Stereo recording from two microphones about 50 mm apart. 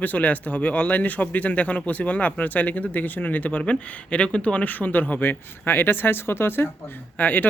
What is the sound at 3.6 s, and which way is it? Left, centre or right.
Speech, left.